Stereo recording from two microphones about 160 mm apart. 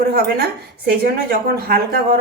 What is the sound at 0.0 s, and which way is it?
Speech, 70° right (ahead or behind).